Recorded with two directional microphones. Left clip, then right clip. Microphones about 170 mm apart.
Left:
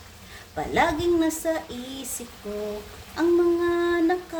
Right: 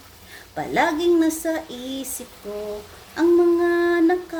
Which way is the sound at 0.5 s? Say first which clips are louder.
Right 2 dB; 15° right (ahead or behind).